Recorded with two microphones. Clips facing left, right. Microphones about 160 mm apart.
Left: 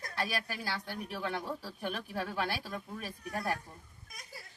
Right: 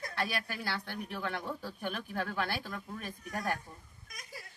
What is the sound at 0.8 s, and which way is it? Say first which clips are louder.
Speech: even; 15° left (ahead or behind).